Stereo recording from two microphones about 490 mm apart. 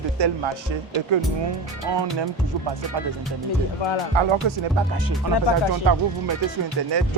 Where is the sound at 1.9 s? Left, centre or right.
Right.